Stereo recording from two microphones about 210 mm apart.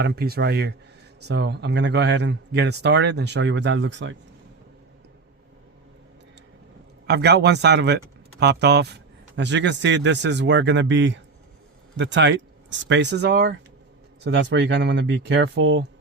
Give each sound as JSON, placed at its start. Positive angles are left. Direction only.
{"t": 0.0, "sound": "speech", "side_deg": -50}
{"t": 7.1, "sound": "speech", "side_deg": -55}